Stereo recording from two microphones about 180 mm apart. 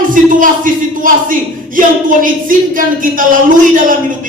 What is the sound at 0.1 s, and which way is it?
Speech, 50° right (ahead or behind).